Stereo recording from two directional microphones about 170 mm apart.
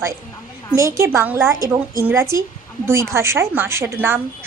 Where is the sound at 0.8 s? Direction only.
15° right (ahead or behind).